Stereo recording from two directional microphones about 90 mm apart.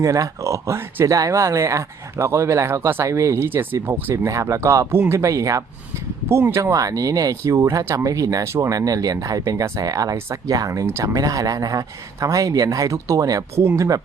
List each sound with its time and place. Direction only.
0.0 s speech: 35° right (ahead or behind)